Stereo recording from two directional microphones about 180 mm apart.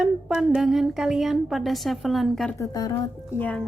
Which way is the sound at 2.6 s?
20° left (ahead or behind).